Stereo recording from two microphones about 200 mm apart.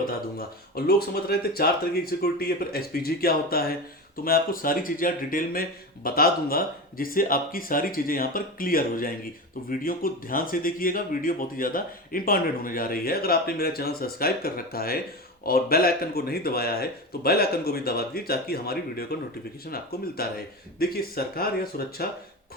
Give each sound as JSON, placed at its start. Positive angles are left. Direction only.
{"t": 0.9, "sound": "speech", "side_deg": 50}